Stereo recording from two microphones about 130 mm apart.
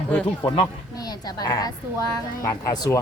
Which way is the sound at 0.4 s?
40° left (ahead or behind).